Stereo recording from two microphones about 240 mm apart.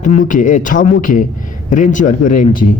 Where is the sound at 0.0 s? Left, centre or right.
Left.